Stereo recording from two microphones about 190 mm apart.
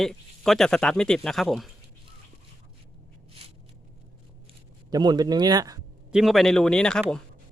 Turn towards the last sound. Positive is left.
turn(degrees=5)  # may be behind; listen again after turning